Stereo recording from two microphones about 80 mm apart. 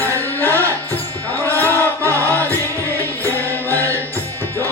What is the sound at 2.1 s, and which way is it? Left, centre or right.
Music, right.